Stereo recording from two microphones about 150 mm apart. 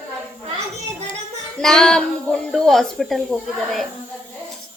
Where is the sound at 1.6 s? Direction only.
5° left (ahead or behind).